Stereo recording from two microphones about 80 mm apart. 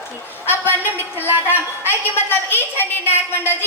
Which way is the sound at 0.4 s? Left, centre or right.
Left.